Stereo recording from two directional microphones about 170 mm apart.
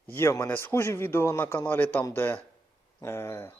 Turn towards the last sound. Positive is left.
turn(degrees=15)  # may be behind; listen again after turning